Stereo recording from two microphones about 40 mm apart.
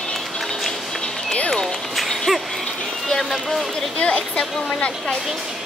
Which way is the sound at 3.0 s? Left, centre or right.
Centre.